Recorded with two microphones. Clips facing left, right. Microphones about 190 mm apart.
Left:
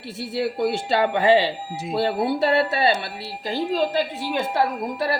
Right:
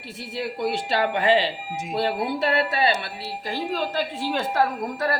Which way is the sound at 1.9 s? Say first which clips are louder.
Left 3 dB; 30° left (ahead or behind).